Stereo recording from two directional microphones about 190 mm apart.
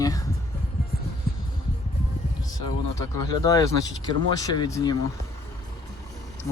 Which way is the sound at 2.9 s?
20° left (ahead or behind).